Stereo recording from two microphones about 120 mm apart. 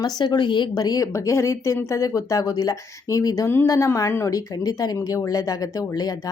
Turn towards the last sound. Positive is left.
turn(degrees=30)  # may be behind; listen again after turning